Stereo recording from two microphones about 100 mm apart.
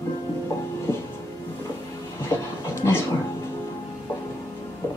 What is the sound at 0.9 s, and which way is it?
Music, 25° left (ahead or behind).